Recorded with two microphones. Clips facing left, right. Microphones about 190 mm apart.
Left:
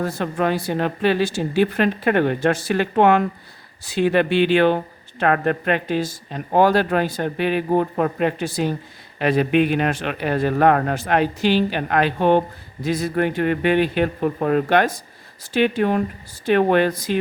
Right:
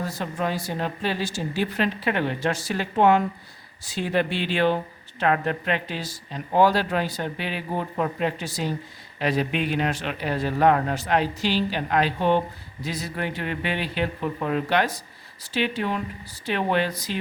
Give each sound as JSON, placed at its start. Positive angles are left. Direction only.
{"t": 0.0, "sound": "speech", "side_deg": 60}